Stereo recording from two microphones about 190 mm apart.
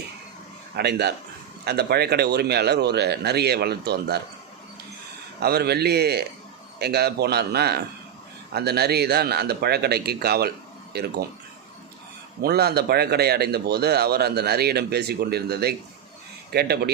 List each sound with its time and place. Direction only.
0.8 s a man's voice: 60° right (ahead or behind)
5.4 s a man's voice: 55° right (ahead or behind)
12.4 s a man's voice: 55° right (ahead or behind)